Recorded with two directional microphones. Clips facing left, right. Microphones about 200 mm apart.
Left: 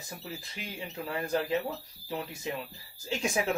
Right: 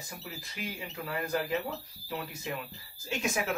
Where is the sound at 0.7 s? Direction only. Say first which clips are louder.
Left 4 dB; 25° left (ahead or behind).